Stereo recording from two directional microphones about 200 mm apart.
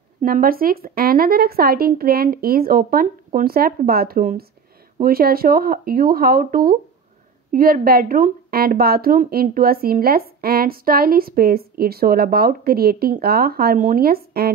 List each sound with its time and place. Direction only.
0.2 s speech: 45° right (ahead or behind)